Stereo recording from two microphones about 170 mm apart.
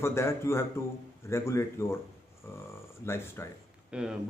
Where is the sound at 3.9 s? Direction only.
5° right (ahead or behind).